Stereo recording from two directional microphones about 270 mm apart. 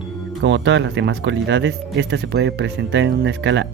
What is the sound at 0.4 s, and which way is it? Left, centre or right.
Speech, right.